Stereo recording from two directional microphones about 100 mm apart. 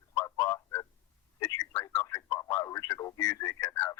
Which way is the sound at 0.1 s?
35° left (ahead or behind).